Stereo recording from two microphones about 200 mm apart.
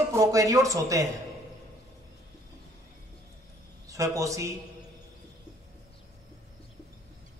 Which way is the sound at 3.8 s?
15° right (ahead or behind).